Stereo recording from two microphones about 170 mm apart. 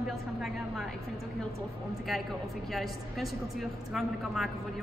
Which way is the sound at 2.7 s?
Centre (ahead or behind).